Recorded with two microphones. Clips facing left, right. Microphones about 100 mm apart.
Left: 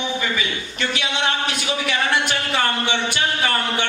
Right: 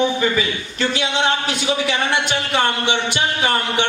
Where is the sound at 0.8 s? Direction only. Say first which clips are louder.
Right 4 dB; 30° right (ahead or behind).